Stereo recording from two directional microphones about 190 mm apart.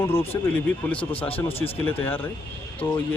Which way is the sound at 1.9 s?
10° left (ahead or behind).